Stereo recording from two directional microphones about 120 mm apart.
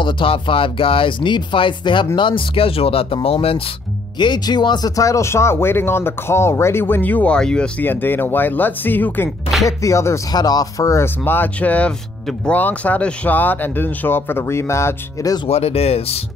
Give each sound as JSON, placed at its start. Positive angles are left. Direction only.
{"t": 0.0, "sound": "speech", "side_deg": 50}
{"t": 4.2, "sound": "speech", "side_deg": 40}
{"t": 9.7, "sound": "speech", "side_deg": 25}
{"t": 15.4, "sound": "speech", "side_deg": 55}